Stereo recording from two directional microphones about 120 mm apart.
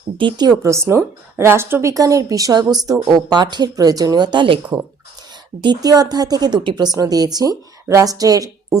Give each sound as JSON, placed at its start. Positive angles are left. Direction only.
{"t": 0.2, "sound": "a woman's voice", "side_deg": -40}
{"t": 0.6, "sound": "a woman's voice", "side_deg": -25}
{"t": 5.6, "sound": "a woman's voice", "side_deg": -30}